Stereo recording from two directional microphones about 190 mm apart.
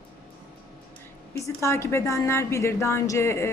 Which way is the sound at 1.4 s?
15° left (ahead or behind).